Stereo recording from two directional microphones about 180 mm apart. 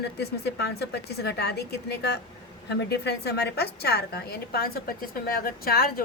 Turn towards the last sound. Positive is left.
turn(degrees=55)  # may be behind; listen again after turning